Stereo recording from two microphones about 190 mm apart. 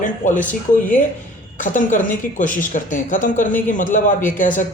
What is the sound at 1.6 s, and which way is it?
Speech, 45° left (ahead or behind).